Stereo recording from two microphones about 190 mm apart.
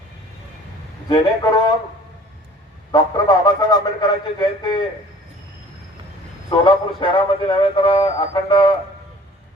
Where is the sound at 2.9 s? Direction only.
20° left (ahead or behind).